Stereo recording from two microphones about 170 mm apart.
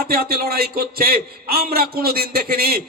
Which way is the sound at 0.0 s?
60° right (ahead or behind).